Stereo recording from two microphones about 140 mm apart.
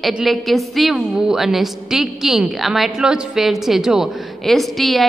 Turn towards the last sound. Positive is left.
turn(degrees=0)  # may be behind; listen again after turning